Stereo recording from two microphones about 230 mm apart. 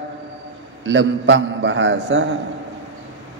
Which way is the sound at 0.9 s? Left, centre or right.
Right.